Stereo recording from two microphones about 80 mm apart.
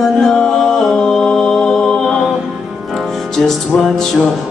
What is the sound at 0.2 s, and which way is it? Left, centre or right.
Music, centre.